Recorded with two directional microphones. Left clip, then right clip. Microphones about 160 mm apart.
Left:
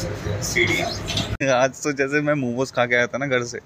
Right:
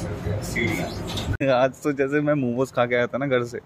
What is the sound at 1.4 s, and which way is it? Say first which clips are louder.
Speech: even; 5° right (ahead or behind).